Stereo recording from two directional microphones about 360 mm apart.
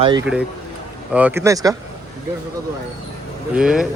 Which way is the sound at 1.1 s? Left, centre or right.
Centre.